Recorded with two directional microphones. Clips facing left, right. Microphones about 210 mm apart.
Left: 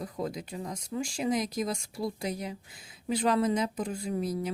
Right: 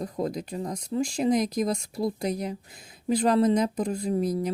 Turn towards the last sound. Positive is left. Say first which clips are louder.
# right 5 dB
turn(degrees=-40)  # may be behind; listen again after turning